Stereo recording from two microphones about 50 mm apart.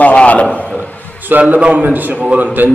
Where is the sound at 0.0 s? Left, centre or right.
Left.